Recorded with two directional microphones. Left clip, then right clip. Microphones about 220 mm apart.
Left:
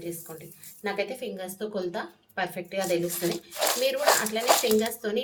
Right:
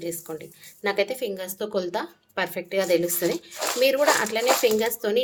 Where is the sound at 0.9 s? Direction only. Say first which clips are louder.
Right 6 dB; 50° right (ahead or behind).